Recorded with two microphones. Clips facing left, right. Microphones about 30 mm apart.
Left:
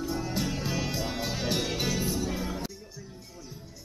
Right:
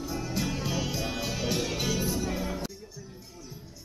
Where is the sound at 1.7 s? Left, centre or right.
Centre.